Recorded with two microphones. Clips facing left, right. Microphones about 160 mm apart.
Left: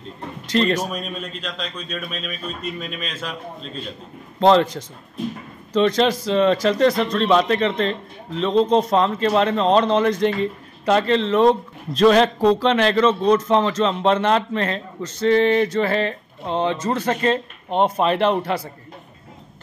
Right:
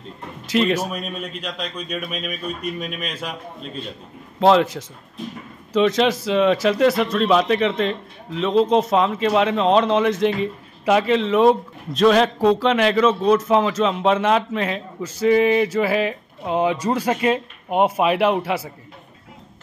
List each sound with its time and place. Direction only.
0.5 s a man's voice: 5° right (ahead or behind)